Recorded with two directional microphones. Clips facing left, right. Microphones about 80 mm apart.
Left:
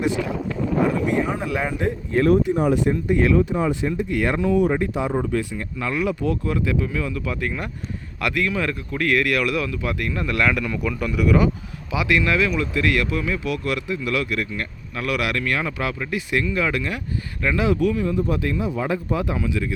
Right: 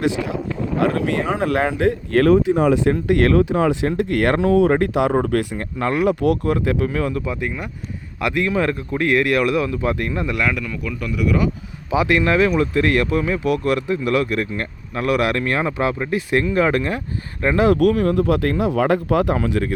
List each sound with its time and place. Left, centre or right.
0.8 s speech: right
5.1 s speech: right
6.1 s speech: right
6.5 s speech: right
7.3 s speech: centre
10.3 s speech: centre
11.9 s speech: right
17.7 s speech: right